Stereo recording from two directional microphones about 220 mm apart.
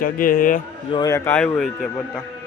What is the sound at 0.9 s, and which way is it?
A man's voice, 15° left (ahead or behind).